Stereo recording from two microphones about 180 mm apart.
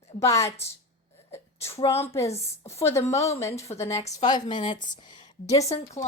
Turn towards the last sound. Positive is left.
turn(degrees=20)  # may be behind; listen again after turning